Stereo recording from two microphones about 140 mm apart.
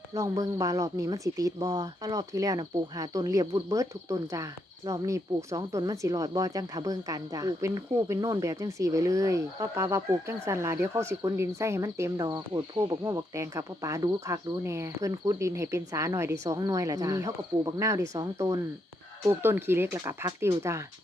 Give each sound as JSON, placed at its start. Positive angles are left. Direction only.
{"t": 0.1, "sound": "speech", "side_deg": -20}